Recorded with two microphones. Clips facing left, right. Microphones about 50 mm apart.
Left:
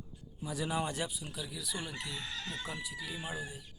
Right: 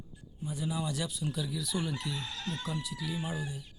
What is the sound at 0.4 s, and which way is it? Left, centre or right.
Speech, left.